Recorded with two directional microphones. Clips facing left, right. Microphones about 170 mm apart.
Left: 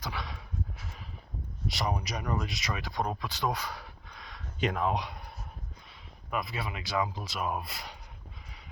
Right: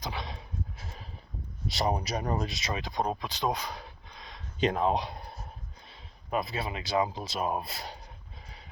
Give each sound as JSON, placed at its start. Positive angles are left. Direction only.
{"t": 0.0, "sound": "a sound", "side_deg": -25}
{"t": 1.7, "sound": "speech", "side_deg": -30}
{"t": 6.3, "sound": "speech", "side_deg": -25}